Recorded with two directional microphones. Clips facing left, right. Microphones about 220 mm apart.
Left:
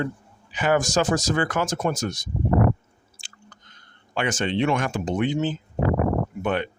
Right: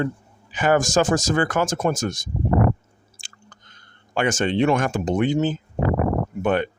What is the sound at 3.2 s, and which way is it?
Chewing, 50° right (ahead or behind).